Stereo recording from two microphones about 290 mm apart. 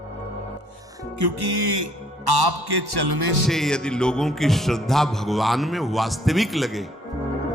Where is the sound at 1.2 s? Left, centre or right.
Right.